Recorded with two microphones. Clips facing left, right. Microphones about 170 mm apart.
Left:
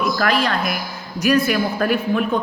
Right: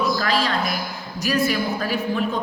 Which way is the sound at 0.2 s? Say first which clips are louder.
Left 3 dB; 65° left (ahead or behind).